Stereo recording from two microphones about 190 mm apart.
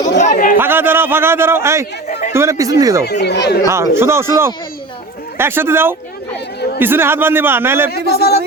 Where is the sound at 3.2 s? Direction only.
60° left (ahead or behind).